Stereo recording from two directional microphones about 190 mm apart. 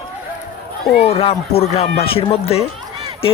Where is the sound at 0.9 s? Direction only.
30° left (ahead or behind).